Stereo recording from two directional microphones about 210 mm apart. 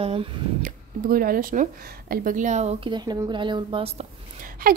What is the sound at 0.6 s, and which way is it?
Speech, 40° right (ahead or behind).